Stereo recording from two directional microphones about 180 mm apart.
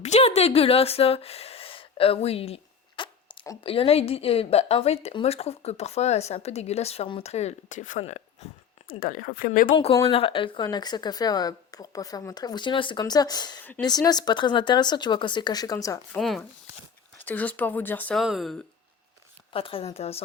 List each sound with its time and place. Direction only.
0.0 s a sound: 35° left (ahead or behind); by 3.6 s 20° left (ahead or behind)
3.6 s a woman's voice: 30° left (ahead or behind); by 9.7 s 50° left (ahead or behind)
9.7 s speech: 30° left (ahead or behind)
16.1 s speech: centre (ahead or behind)
18.2 s speech: centre (ahead or behind)
19.5 s a woman's voice: 30° left (ahead or behind)